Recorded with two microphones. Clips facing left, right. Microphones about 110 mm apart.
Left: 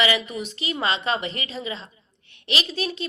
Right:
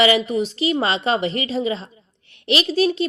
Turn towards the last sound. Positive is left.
turn(degrees=-35)  # may be behind; listen again after turning